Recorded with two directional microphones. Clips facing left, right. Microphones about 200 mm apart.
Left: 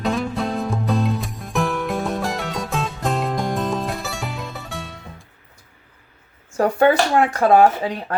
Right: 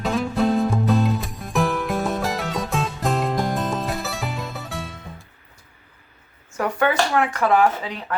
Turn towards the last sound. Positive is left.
turn(degrees=35)  # may be behind; listen again after turning